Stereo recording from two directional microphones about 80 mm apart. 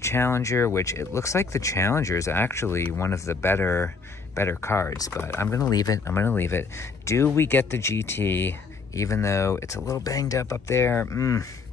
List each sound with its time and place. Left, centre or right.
0.0 s speech: left
5.7 s speech: left
6.0 s speech: left
8.9 s speech: left